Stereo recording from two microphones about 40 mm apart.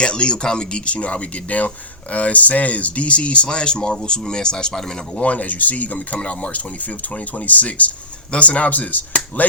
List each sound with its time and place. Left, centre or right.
0.0 s speech: left
5.2 s speech: left
6.1 s speech: left
7.4 s speech: left